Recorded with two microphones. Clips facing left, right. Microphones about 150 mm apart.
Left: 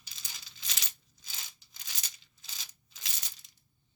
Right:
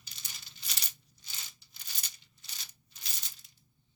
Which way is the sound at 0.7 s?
90° left.